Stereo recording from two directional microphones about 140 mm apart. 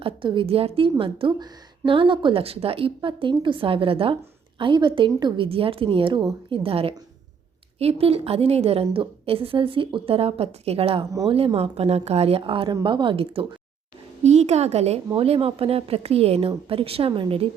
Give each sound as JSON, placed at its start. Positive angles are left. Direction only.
{"t": 0.0, "sound": "a woman's voice", "side_deg": -35}
{"t": 14.3, "sound": "a woman's voice", "side_deg": -50}